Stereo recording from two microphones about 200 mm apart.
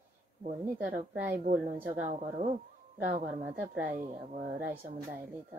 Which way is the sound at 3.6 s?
40° right (ahead or behind).